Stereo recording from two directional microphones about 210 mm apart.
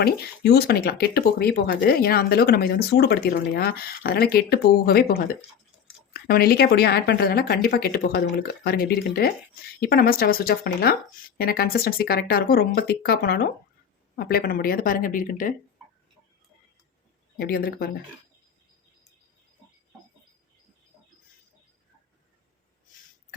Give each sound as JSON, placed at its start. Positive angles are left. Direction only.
{"t": 0.0, "sound": "speech", "side_deg": 45}
{"t": 17.3, "sound": "speech", "side_deg": 45}